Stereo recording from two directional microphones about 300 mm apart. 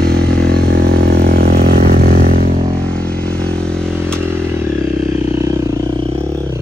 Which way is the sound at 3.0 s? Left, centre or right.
Centre.